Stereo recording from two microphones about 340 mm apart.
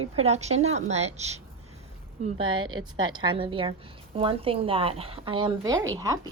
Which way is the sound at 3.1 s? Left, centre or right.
Centre.